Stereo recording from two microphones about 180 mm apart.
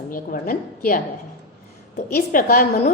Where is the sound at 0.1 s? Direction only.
50° left (ahead or behind).